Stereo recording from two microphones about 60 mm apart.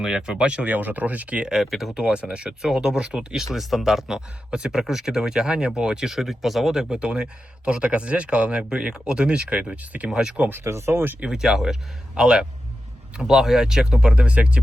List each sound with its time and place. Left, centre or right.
0.0 s speech: centre
1.6 s speech: centre
2.0 s speech: centre
10.1 s speech: centre
10.5 s speech: right
11.2 s speech: centre